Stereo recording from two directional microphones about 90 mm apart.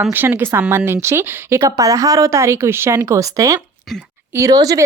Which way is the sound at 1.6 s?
40° right (ahead or behind).